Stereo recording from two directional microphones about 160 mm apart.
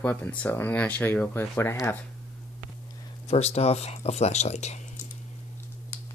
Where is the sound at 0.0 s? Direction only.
10° left (ahead or behind).